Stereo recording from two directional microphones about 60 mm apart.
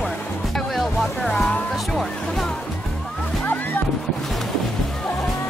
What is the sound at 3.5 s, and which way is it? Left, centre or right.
Music, left.